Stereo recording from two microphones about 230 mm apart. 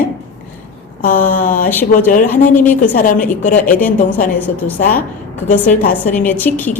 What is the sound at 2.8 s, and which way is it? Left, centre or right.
Speech, left.